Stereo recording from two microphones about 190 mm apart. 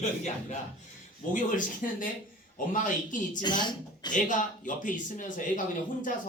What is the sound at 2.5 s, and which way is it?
Speech, 45° left (ahead or behind).